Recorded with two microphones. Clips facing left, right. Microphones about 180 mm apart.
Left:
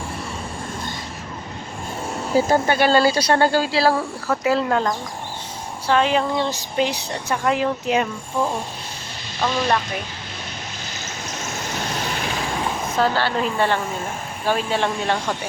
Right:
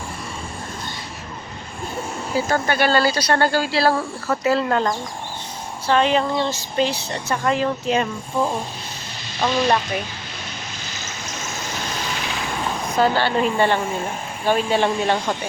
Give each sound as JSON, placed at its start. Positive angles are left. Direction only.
{"t": 2.6, "sound": "speech", "side_deg": 20}
{"t": 9.6, "sound": "speech", "side_deg": 0}
{"t": 11.9, "sound": "vehicle", "side_deg": 55}
{"t": 13.0, "sound": "speech", "side_deg": 0}